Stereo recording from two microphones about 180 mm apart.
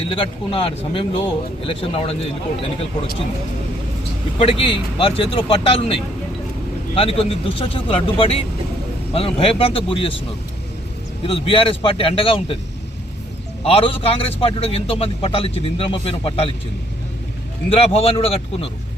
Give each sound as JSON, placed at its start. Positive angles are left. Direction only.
{"t": 0.1, "sound": "a man's voice", "side_deg": 30}
{"t": 4.4, "sound": "a man's voice", "side_deg": 30}
{"t": 11.2, "sound": "a man's voice", "side_deg": 30}
{"t": 13.7, "sound": "a man's voice", "side_deg": 30}
{"t": 17.7, "sound": "a man's voice", "side_deg": 35}